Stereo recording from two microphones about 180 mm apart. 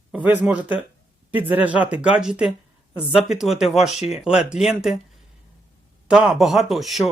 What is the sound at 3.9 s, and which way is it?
Speech, 35° left (ahead or behind).